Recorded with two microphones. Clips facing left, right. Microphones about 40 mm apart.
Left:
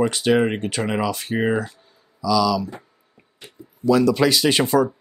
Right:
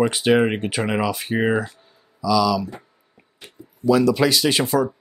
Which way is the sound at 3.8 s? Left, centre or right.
Centre.